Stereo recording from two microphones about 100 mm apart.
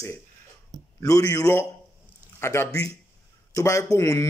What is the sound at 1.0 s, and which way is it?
Speech, 35° left (ahead or behind).